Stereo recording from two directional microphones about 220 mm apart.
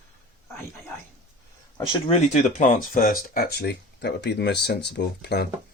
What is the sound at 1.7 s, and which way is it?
Speech, 20° left (ahead or behind).